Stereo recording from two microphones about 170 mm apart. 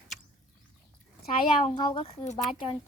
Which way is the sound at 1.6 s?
40° left (ahead or behind).